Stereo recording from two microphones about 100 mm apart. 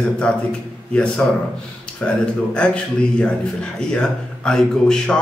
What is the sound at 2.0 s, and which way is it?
Speech, 15° left (ahead or behind).